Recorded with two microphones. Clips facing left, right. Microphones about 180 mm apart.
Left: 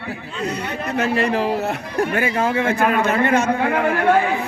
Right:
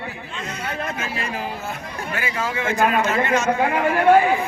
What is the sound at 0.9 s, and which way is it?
Speech, 65° left (ahead or behind).